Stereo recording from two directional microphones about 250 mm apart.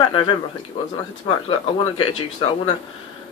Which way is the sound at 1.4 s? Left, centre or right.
Left.